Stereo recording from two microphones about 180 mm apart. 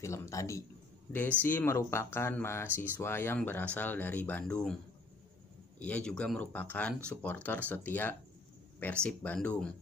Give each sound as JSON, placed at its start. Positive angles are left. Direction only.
{"t": 0.0, "sound": "speech", "side_deg": 15}
{"t": 5.8, "sound": "speech", "side_deg": 5}